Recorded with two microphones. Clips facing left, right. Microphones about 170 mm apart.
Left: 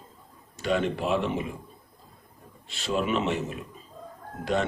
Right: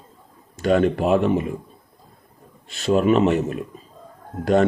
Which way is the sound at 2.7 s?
45° right (ahead or behind).